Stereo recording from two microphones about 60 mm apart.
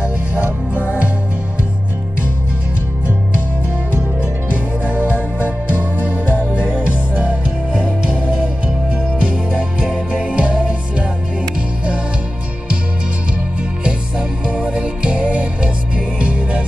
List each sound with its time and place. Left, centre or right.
0.0 s music: right
3.9 s music: right
13.8 s music: centre